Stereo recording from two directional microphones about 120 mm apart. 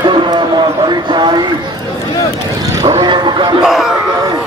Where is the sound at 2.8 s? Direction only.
40° right (ahead or behind).